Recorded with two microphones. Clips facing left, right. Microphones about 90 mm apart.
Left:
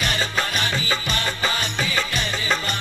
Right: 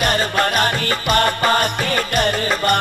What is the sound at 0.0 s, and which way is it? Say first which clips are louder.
Music: right 7 dB; 50° right (ahead or behind).